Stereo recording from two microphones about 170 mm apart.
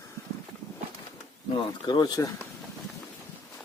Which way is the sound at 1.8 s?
25° left (ahead or behind).